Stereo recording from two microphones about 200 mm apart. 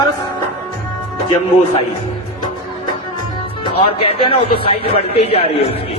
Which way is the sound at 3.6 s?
25° left (ahead or behind).